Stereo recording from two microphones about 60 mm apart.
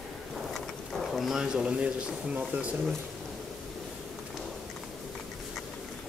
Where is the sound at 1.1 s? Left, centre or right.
Centre.